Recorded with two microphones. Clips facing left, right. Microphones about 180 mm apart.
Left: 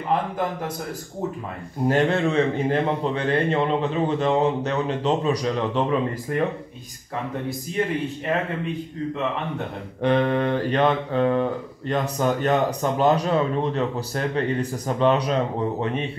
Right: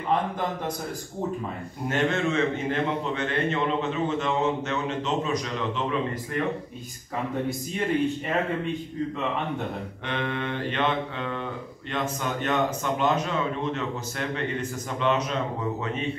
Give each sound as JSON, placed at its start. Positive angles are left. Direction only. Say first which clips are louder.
{"t": 1.9, "sound": "a man's voice", "louder": "left 5 dB", "side_deg": 35}
{"t": 10.0, "sound": "a man's voice", "louder": "left 10 dB", "side_deg": 40}